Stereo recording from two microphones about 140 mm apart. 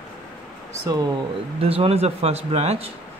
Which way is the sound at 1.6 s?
45° right (ahead or behind).